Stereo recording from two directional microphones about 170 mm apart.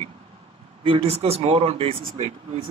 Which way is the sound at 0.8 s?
35° right (ahead or behind).